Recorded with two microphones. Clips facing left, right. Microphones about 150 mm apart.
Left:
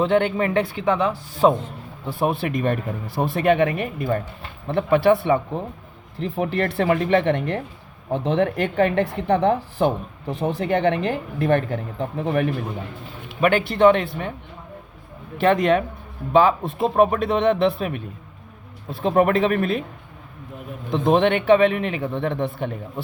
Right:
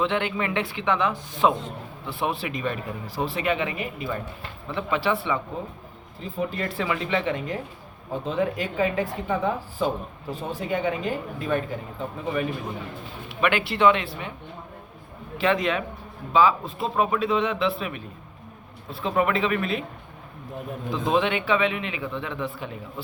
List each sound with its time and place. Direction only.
0.0 s a man's voice: 45° left (ahead or behind)
2.1 s a man's voice: 50° left (ahead or behind)
6.1 s speech: 70° left (ahead or behind)
8.1 s speech: 80° left
13.4 s a man's voice: 45° left (ahead or behind)
15.4 s a man's voice: 50° left (ahead or behind)
20.9 s a man's voice: 55° left (ahead or behind)